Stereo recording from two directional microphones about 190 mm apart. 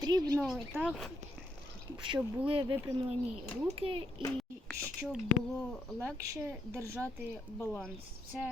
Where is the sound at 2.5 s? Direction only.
25° right (ahead or behind).